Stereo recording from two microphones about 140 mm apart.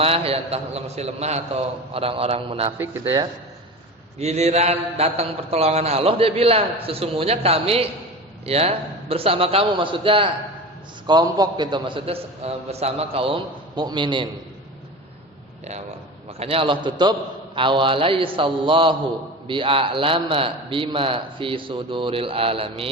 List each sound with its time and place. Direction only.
0.0 s mantra: 45° right (ahead or behind)
3.0 s a man's voice: 40° right (ahead or behind)
4.2 s mantra: 50° right (ahead or behind)
11.0 s a man's voice: 30° right (ahead or behind)
16.4 s a man's voice: 40° right (ahead or behind)